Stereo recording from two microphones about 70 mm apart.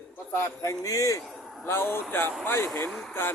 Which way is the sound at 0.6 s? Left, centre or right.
Left.